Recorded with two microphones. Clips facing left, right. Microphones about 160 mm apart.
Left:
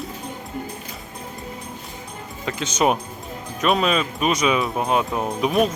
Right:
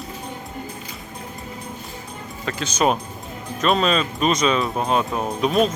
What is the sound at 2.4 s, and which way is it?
Speech, 20° left (ahead or behind).